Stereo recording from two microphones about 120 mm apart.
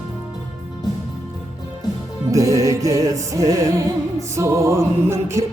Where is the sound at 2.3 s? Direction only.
30° right (ahead or behind).